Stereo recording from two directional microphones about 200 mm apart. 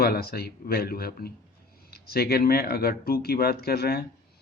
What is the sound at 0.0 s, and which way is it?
Speech, 50° left (ahead or behind).